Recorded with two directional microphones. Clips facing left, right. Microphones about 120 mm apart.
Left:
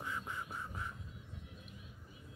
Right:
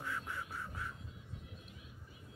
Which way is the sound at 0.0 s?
20° left (ahead or behind).